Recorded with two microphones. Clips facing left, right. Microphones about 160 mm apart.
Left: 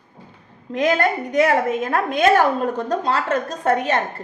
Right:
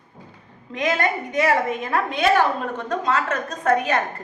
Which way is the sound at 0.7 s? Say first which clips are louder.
Left 4 dB; 40° left (ahead or behind).